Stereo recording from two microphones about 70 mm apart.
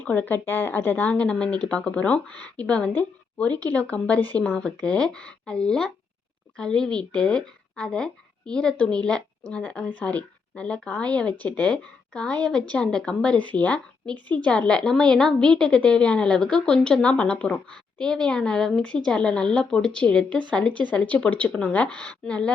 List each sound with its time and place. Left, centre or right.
0.0 s speech: left
1.1 s a woman's voice: centre